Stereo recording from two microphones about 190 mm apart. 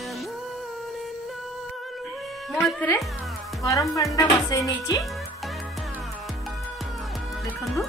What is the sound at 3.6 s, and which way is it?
Speech, 15° left (ahead or behind).